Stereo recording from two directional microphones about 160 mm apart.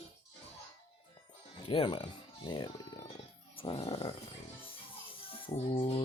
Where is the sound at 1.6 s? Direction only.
35° left (ahead or behind).